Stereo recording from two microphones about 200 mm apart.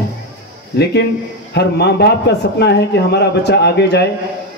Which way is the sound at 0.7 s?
55° left (ahead or behind).